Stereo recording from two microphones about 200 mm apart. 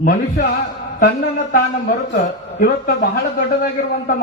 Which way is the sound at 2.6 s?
45° left (ahead or behind).